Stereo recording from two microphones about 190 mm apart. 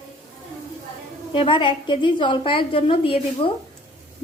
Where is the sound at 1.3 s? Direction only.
25° left (ahead or behind).